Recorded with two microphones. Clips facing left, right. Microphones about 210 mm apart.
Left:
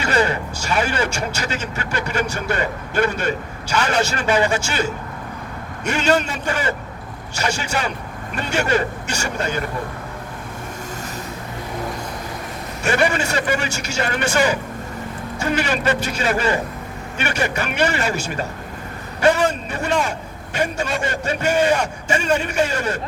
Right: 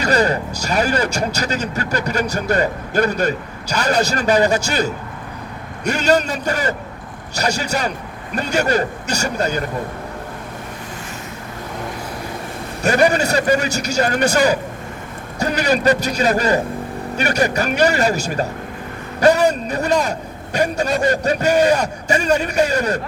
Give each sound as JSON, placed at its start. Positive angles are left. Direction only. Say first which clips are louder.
{"t": 0.0, "sound": "speech", "louder": "right 3 dB", "side_deg": -40}
{"t": 12.8, "sound": "speech", "louder": "right 4 dB", "side_deg": -40}